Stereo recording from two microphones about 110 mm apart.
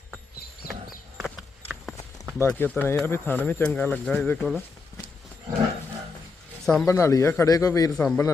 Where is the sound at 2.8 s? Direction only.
20° left (ahead or behind).